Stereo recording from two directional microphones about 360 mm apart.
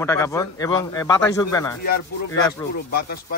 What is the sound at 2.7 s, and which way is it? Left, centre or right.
Speech, left.